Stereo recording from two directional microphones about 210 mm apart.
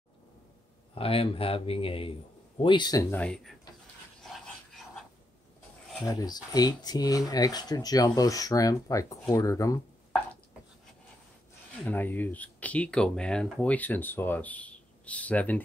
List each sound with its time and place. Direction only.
0.9 s a man's voice: 25° left (ahead or behind); by 3.5 s 5° left (ahead or behind)
4.2 s a sound: centre (ahead or behind)
6.0 s speech: 20° left (ahead or behind)
11.8 s speech: 10° left (ahead or behind)